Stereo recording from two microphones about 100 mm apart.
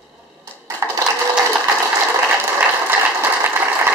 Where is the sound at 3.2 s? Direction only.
20° right (ahead or behind).